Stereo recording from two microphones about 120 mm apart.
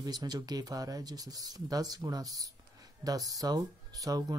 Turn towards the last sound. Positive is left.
turn(degrees=-30)  # may be behind; listen again after turning